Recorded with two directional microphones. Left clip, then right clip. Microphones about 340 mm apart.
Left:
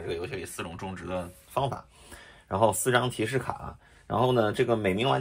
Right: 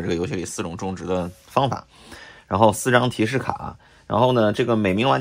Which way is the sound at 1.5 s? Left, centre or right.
Right.